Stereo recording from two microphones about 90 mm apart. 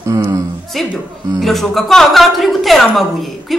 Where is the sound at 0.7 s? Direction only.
Centre (ahead or behind).